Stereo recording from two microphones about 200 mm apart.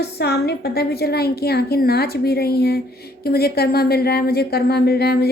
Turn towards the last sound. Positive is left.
turn(degrees=55)  # may be behind; listen again after turning